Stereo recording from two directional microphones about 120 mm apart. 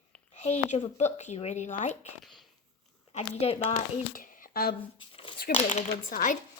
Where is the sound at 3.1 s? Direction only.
60° left (ahead or behind).